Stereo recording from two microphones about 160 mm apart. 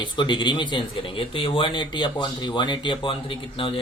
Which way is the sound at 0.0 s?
30° left (ahead or behind).